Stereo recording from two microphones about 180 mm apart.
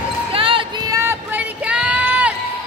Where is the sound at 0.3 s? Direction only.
30° right (ahead or behind); by 2.3 s 5° right (ahead or behind).